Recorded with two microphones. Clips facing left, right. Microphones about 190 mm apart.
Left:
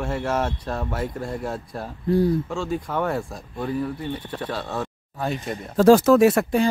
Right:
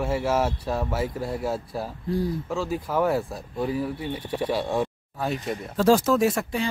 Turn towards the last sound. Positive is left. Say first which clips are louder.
# left 6 dB
turn(degrees=65)  # may be behind; listen again after turning